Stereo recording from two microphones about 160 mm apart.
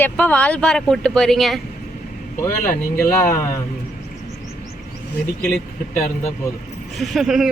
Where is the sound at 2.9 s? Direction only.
15° left (ahead or behind).